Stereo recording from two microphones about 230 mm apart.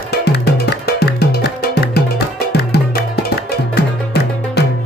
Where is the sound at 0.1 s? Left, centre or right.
Left.